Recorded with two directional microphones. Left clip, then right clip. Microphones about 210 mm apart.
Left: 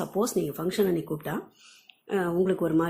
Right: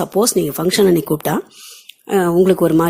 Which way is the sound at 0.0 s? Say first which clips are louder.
Right 12 dB; 40° right (ahead or behind).